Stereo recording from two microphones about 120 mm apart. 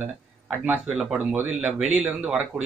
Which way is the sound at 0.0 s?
15° right (ahead or behind).